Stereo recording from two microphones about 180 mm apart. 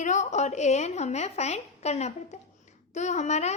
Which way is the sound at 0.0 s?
40° left (ahead or behind).